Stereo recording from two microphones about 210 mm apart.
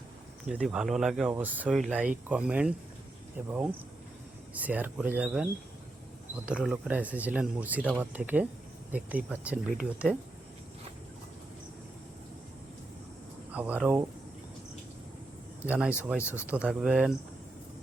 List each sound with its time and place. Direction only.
0.4 s speech: 5° right (ahead or behind)
13.5 s speech: 5° right (ahead or behind)
15.6 s speech: 5° right (ahead or behind)
16.2 s speech: 10° left (ahead or behind)
16.5 s speech: 5° right (ahead or behind)